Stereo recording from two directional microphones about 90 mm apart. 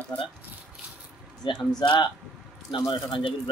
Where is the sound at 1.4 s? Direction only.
55° left (ahead or behind).